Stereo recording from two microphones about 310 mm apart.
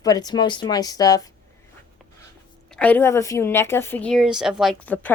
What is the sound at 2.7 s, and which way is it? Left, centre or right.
Speech, centre.